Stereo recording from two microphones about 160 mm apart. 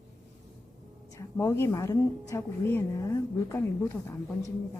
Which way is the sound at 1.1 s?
20° left (ahead or behind).